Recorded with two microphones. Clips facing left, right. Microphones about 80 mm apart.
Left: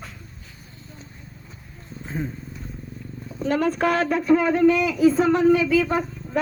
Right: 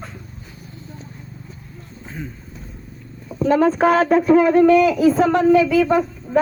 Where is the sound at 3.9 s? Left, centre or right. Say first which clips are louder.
Right 4 dB; right.